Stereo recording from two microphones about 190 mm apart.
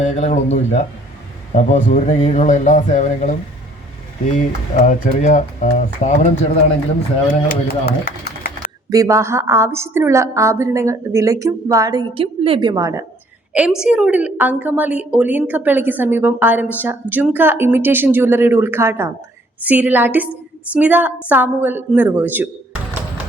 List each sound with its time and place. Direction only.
0.0 s speech: 35° left (ahead or behind)
4.7 s speech: 40° left (ahead or behind)
7.4 s speech: 50° left (ahead or behind)
8.9 s a woman's voice: 15° right (ahead or behind)
13.5 s a woman's voice: 5° right (ahead or behind)